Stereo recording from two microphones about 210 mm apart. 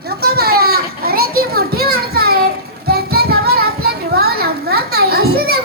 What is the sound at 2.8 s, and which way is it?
Music, 50° right (ahead or behind).